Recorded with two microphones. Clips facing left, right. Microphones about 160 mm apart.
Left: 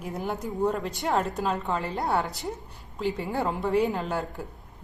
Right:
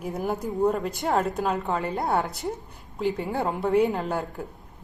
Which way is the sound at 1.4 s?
10° right (ahead or behind).